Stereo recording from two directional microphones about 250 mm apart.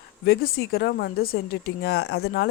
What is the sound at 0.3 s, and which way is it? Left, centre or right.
Speech, left.